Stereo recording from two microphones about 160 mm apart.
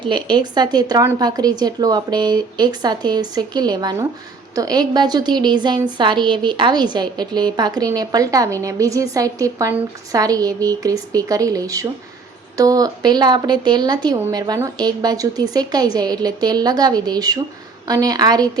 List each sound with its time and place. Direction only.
0.0 s a woman's voice: 30° right (ahead or behind)